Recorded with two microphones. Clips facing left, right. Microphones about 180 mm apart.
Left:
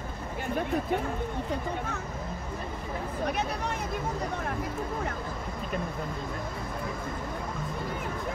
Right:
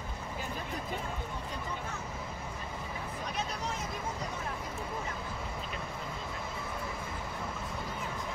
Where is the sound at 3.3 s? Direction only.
60° left (ahead or behind).